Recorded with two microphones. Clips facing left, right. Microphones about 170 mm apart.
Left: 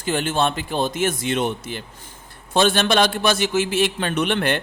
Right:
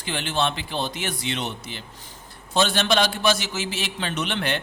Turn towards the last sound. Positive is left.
turn(degrees=50)  # may be behind; listen again after turning